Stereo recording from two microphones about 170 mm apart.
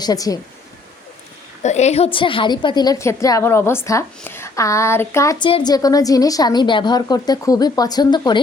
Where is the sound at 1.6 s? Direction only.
40° left (ahead or behind).